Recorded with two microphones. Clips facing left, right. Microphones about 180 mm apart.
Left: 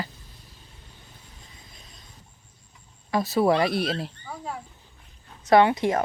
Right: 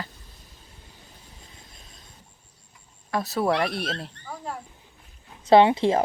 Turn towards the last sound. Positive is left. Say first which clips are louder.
# right 2 dB
turn(degrees=-30)  # may be behind; listen again after turning